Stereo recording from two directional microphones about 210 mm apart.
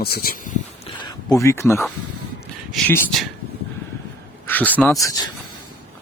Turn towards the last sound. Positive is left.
turn(degrees=15)  # may be behind; listen again after turning